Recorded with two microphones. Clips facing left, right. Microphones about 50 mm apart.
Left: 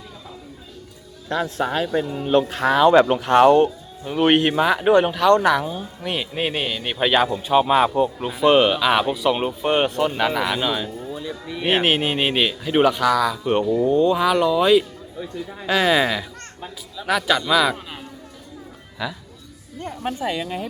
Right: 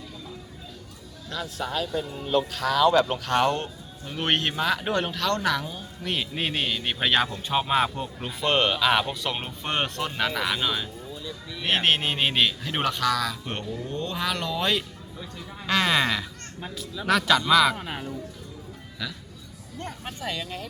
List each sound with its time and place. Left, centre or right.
1.3 s speech: left; by 10.8 s centre
11.2 s clip-clop: left
11.6 s speech: centre
17.7 s a man's voice: right
19.0 s speech: left